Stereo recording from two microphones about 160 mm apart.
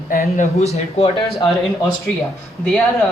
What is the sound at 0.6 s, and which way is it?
Speech, 40° left (ahead or behind).